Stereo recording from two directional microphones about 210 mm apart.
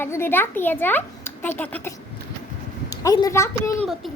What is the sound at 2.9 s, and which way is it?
Speech, 20° left (ahead or behind).